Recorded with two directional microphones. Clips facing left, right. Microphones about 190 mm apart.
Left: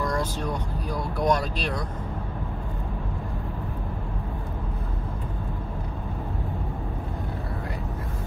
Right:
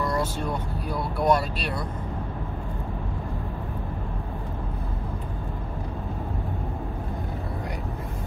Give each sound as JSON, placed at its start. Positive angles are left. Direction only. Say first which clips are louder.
{"t": 0.0, "sound": "vehicle", "louder": "right 1 dB", "side_deg": -5}